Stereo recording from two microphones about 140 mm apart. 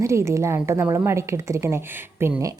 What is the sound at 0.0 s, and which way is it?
A woman's voice, 20° right (ahead or behind).